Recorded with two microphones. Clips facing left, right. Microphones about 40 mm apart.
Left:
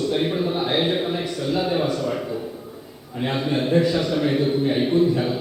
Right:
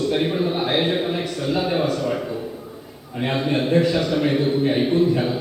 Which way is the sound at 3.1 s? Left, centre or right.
Centre.